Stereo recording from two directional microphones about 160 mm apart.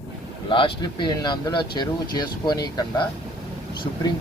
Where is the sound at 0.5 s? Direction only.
30° left (ahead or behind).